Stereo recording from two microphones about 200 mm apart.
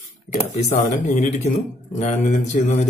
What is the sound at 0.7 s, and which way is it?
Speech, 35° left (ahead or behind).